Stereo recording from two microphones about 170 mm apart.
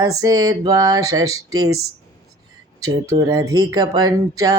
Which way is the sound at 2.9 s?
20° right (ahead or behind).